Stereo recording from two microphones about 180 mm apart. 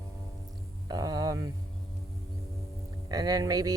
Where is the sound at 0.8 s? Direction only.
20° right (ahead or behind).